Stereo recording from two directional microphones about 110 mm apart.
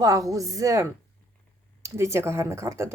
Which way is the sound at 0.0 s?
30° right (ahead or behind).